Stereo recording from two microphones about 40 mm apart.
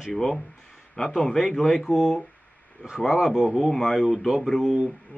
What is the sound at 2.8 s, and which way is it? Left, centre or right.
Speech, centre.